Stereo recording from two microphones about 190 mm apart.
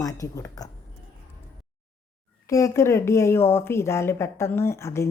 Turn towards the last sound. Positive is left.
turn(degrees=15)  # may be behind; listen again after turning